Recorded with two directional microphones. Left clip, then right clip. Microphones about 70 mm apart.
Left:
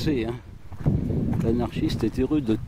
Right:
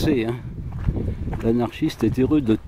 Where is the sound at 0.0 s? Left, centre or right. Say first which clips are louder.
Right 5 dB; centre.